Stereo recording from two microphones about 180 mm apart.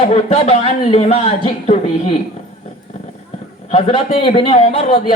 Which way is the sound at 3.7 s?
35° left (ahead or behind).